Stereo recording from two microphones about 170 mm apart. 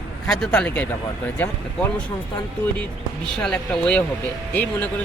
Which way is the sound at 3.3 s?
5° left (ahead or behind).